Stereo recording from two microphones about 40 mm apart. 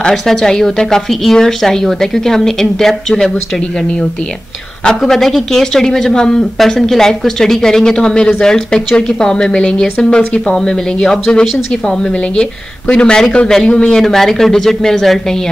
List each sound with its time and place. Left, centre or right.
0.1 s speech: centre
5.0 s speech: centre; by 14.0 s left
14.0 s speech: centre